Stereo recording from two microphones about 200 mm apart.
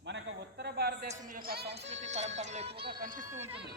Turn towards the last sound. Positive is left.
turn(degrees=-10)  # may be behind; listen again after turning